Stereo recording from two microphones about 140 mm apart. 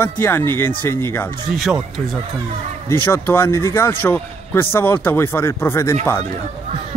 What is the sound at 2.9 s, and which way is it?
A man's voice, 15° left (ahead or behind).